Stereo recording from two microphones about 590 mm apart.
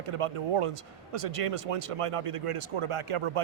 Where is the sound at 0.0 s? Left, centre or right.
Right.